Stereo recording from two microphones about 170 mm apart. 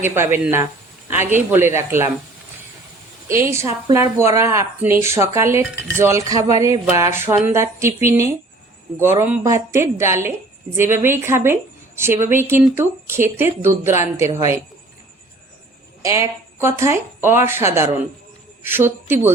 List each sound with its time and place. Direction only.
0.0 s speech: 15° right (ahead or behind)
3.4 s speech: 15° right (ahead or behind)
16.0 s speech: 20° right (ahead or behind)